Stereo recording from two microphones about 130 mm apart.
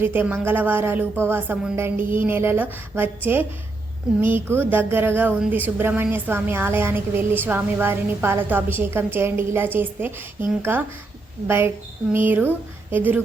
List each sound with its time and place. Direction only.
0.0 s a woman's voice: 15° right (ahead or behind)